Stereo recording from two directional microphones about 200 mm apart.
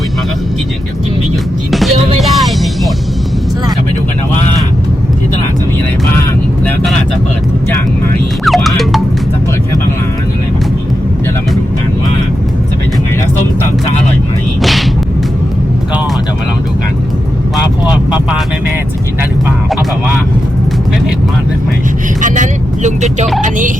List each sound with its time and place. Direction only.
8.4 s music: centre (ahead or behind)
14.6 s a sound: centre (ahead or behind)
22.2 s vehicle: 35° right (ahead or behind)
23.4 s music: 40° right (ahead or behind)